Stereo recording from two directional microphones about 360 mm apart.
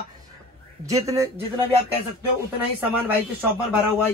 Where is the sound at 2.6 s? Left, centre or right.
Centre.